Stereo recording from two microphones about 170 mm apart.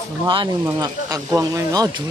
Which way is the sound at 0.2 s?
30° right (ahead or behind).